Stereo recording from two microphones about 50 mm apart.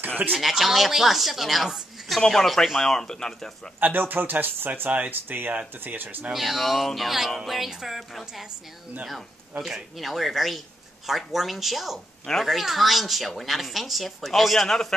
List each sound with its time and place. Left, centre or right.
0.3 s speech: centre
2.0 s speech: centre
3.8 s speech: right
6.3 s speech: centre
9.9 s speech: centre